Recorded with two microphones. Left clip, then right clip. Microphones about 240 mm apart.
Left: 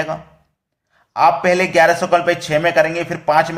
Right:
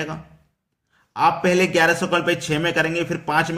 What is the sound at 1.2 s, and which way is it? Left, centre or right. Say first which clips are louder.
A man's voice: left 4 dB; centre.